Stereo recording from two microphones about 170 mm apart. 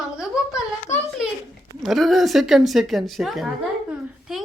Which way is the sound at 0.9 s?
45° left (ahead or behind).